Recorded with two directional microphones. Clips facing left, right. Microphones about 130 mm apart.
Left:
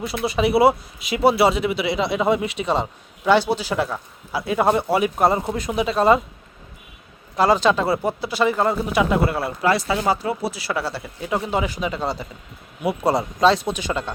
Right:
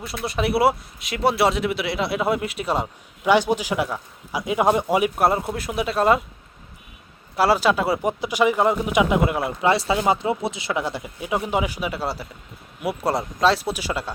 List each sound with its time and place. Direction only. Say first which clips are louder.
0.0 s a man's voice: left 4 dB; centre (ahead or behind)
7.3 s a man's voice: left 1 dB; 5° right (ahead or behind)